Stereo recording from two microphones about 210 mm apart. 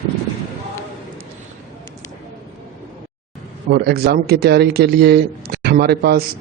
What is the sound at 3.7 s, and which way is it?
A man's voice, 50° right (ahead or behind).